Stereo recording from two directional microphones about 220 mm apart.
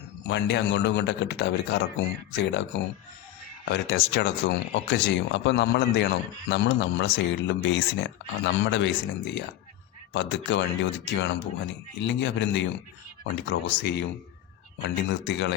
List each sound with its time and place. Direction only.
0.3 s speech: 55° left (ahead or behind)